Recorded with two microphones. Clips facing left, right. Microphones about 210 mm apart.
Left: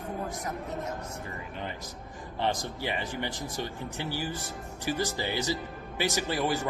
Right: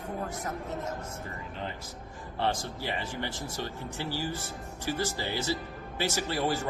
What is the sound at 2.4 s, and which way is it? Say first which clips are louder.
Speech: left 1 dB; 15° left (ahead or behind).